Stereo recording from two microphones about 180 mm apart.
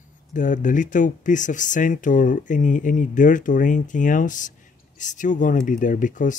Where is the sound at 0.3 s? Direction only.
45° left (ahead or behind).